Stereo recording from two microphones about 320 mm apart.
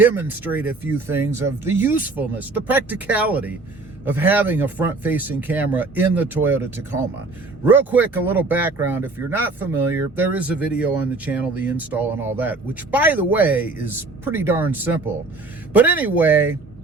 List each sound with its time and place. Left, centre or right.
0.0 s speech: centre